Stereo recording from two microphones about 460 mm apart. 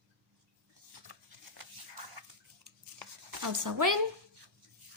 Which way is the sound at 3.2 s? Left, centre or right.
Right.